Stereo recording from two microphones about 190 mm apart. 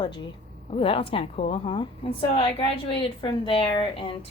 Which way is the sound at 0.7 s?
30° left (ahead or behind).